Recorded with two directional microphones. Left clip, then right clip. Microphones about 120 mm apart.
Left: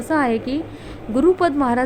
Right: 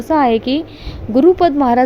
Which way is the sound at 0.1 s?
30° right (ahead or behind).